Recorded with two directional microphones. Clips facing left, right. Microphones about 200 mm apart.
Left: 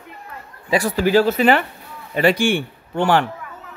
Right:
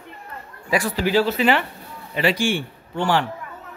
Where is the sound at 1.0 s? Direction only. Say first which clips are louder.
Left 5 dB; 45° left (ahead or behind).